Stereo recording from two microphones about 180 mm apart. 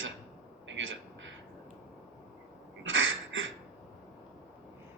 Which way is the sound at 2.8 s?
90° right.